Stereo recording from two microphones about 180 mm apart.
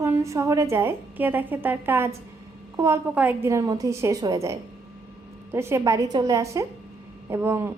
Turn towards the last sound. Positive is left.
turn(degrees=-15)  # may be behind; listen again after turning